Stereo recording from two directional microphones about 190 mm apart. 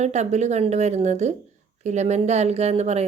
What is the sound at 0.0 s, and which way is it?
A woman's voice, 35° right (ahead or behind).